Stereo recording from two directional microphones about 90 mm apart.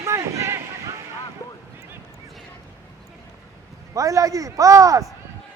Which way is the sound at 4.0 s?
40° right (ahead or behind).